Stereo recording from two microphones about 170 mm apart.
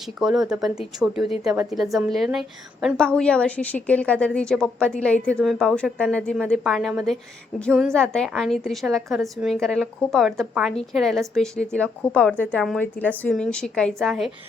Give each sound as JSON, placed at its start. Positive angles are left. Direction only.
{"t": 0.0, "sound": "a woman's voice", "side_deg": -5}